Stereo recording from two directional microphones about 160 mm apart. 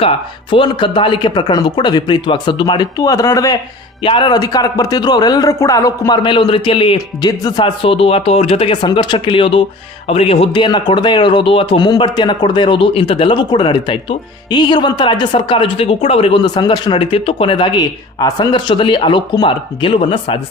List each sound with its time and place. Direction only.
0.0 s a man's voice: 35° left (ahead or behind)
4.0 s a man's voice: 30° left (ahead or behind)